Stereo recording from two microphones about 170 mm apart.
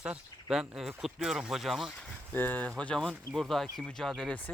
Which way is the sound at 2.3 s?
10° left (ahead or behind).